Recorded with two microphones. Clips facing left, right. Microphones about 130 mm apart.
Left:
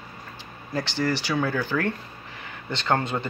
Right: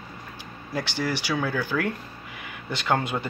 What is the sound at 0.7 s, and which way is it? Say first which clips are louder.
Speech: left 2 dB; 10° right (ahead or behind).